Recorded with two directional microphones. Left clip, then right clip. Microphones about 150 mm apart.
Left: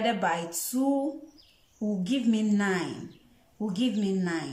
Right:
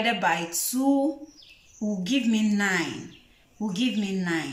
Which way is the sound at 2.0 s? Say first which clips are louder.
Right 3 dB; 15° left (ahead or behind).